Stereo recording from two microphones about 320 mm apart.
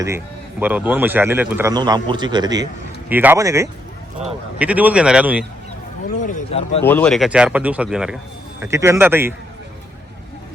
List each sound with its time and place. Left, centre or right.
0.6 s a man's voice: centre
6.1 s speech: left
6.8 s a man's voice: centre